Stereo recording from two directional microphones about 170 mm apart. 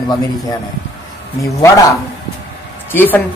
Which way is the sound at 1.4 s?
20° left (ahead or behind).